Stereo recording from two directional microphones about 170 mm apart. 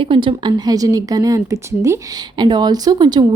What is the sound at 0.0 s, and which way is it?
Speech, 30° right (ahead or behind).